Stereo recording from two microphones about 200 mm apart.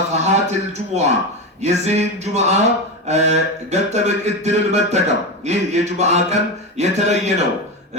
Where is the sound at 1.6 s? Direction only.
35° right (ahead or behind).